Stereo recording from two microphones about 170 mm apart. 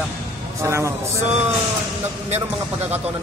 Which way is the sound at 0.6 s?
15° right (ahead or behind).